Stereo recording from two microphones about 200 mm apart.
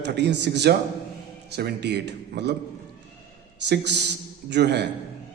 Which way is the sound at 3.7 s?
60° right (ahead or behind).